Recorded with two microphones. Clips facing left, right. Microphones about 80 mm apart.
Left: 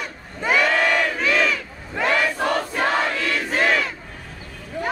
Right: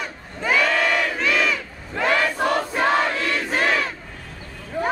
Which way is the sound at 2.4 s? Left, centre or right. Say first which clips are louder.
Right 1 dB; centre.